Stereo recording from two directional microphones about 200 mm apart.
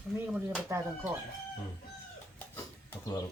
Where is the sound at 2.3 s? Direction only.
10° left (ahead or behind).